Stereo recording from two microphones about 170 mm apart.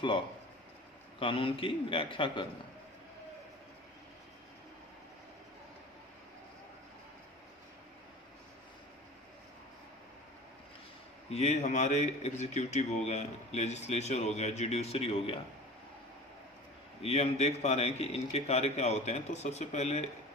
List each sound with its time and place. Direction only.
1.2 s a man's voice: 30° left (ahead or behind)
11.2 s a man's voice: 40° left (ahead or behind)
17.0 s a man's voice: 40° left (ahead or behind)